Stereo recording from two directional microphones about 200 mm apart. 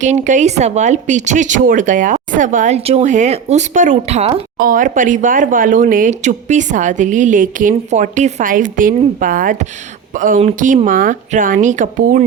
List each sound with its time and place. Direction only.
0.0 s speech: 35° right (ahead or behind)
4.5 s speech: 45° right (ahead or behind)